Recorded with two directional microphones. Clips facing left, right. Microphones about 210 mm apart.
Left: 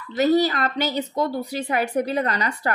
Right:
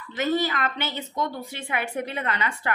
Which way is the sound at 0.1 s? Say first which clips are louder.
Left 6 dB; 35° left (ahead or behind).